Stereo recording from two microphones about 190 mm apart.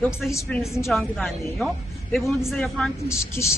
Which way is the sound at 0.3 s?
15° left (ahead or behind).